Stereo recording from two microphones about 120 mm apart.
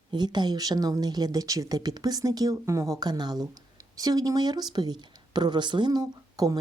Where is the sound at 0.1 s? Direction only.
35° right (ahead or behind).